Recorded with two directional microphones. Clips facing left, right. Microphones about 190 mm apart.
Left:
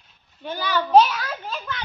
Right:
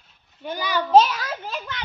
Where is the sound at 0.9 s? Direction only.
25° right (ahead or behind).